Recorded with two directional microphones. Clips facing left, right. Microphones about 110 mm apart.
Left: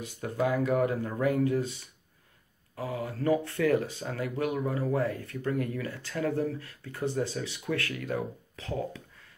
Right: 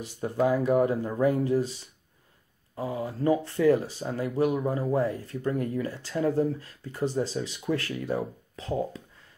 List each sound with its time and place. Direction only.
0.2 s speech: 20° right (ahead or behind)
2.7 s speech: 25° right (ahead or behind)